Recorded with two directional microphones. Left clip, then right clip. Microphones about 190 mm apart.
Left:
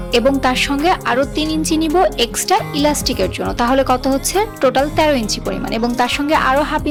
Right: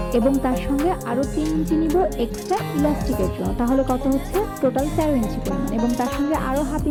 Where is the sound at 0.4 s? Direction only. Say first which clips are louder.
Left 7 dB; 10° left (ahead or behind).